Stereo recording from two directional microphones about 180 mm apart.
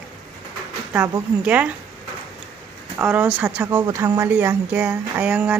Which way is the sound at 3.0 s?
10° right (ahead or behind).